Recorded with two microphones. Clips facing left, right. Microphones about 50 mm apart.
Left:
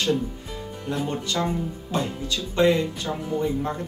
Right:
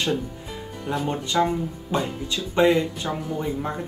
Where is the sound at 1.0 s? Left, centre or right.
Centre.